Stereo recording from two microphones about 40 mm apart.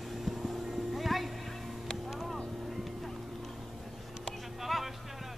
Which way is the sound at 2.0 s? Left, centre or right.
Centre.